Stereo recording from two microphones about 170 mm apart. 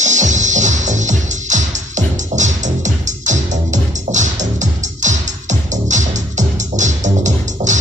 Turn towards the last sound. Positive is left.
turn(degrees=-45)  # may be behind; listen again after turning